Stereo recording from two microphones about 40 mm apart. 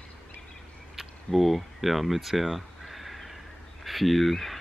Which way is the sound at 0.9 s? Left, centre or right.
Centre.